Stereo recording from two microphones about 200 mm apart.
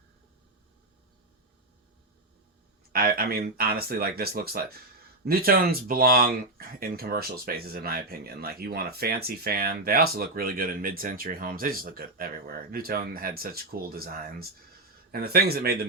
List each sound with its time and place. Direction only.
2.9 s speech: 45° right (ahead or behind)